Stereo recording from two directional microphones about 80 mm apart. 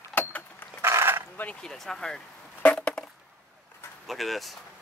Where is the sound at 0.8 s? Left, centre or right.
Right.